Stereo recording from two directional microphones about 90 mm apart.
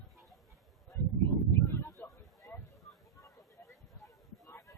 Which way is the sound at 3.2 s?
40° left (ahead or behind).